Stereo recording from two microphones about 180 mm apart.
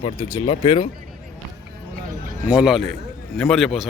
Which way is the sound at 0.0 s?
30° left (ahead or behind).